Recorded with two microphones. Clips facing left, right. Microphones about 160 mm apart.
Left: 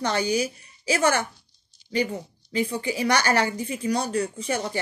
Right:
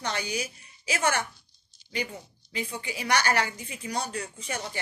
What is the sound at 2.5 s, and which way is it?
Speech, 35° left (ahead or behind).